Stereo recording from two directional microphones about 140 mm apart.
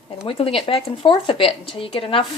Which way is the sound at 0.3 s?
40° left (ahead or behind).